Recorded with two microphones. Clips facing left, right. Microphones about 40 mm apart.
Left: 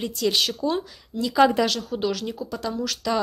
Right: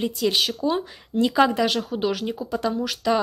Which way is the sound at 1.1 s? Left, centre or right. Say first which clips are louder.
Right 6 dB; right.